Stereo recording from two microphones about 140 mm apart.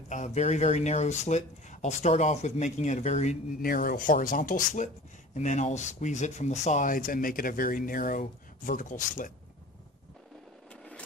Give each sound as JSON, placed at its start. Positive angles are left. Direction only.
{"t": 0.1, "sound": "speech", "side_deg": 55}
{"t": 3.6, "sound": "speech", "side_deg": 90}